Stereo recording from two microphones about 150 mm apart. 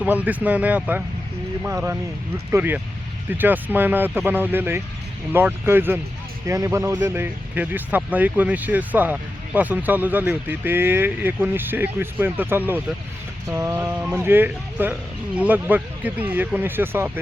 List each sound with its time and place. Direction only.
0.0 s speech: 10° right (ahead or behind)